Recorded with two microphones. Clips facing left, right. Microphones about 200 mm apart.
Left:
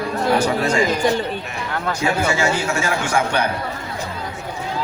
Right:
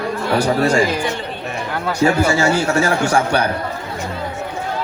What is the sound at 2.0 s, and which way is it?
A man's voice, 40° right (ahead or behind).